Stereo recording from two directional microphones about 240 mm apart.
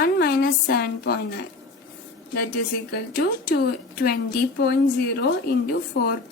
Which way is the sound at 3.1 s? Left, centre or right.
Left.